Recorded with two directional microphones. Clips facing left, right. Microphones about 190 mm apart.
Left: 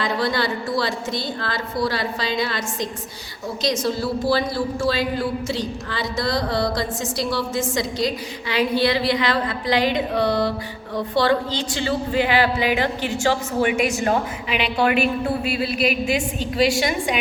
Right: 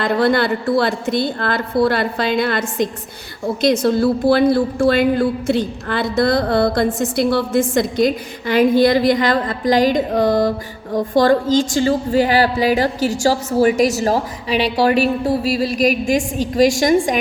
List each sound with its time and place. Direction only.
0.0 s a woman's voice: 55° right (ahead or behind)